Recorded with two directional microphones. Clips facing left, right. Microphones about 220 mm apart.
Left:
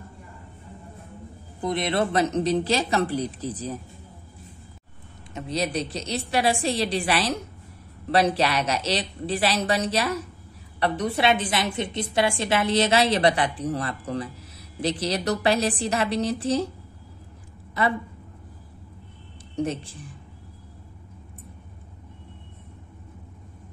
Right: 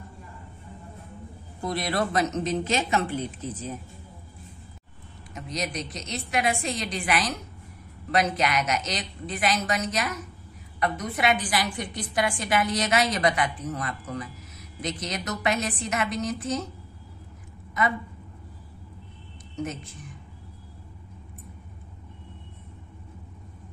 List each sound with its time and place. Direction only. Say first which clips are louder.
1.6 s a woman's voice: left 3 dB; 20° left (ahead or behind)
5.3 s a woman's voice: left 5 dB; 30° left (ahead or behind)
17.8 s a woman's voice: left 2 dB; 30° left (ahead or behind)
19.5 s a woman's voice: left 6 dB; 30° left (ahead or behind)